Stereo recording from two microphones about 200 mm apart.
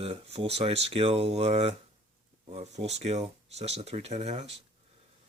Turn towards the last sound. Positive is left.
turn(degrees=-35)  # may be behind; listen again after turning